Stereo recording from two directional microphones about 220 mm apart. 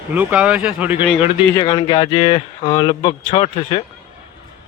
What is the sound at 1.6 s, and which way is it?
Speech, 20° left (ahead or behind).